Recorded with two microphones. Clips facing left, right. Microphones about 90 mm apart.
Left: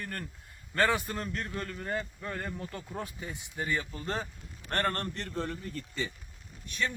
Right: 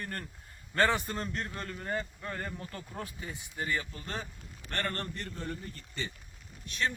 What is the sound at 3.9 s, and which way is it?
Speech, 25° left (ahead or behind).